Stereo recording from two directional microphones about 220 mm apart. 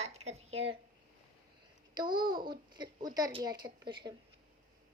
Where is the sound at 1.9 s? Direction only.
20° right (ahead or behind).